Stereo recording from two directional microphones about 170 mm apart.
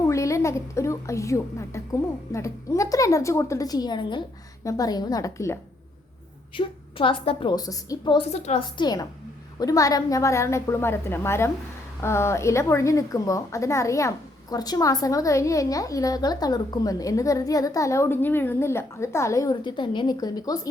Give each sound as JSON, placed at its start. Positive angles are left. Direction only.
{"t": 0.0, "sound": "a woman's voice", "side_deg": 20}
{"t": 6.6, "sound": "a woman's voice", "side_deg": 30}
{"t": 8.3, "sound": "a woman's voice", "side_deg": 40}
{"t": 8.8, "sound": "a woman's voice", "side_deg": 25}